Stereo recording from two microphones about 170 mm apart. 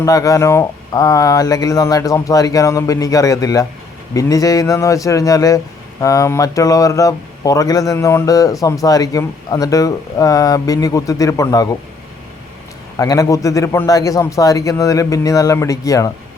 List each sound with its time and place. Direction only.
0.0 s speech: 20° left (ahead or behind)
13.0 s speech: 20° left (ahead or behind)